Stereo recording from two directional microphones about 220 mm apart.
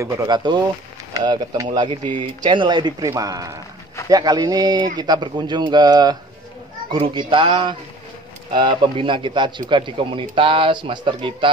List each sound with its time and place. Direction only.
0.0 s a man's voice: 15° right (ahead or behind)